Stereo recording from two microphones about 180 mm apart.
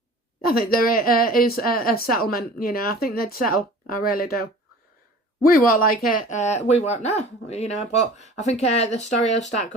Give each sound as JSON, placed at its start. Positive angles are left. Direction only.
{"t": 0.4, "sound": "speech", "side_deg": 55}